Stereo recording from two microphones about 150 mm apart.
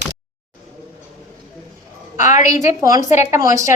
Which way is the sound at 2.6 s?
20° right (ahead or behind).